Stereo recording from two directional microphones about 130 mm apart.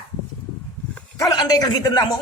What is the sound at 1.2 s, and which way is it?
Speech, 30° left (ahead or behind).